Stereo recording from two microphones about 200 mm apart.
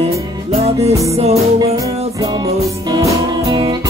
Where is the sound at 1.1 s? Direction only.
30° right (ahead or behind).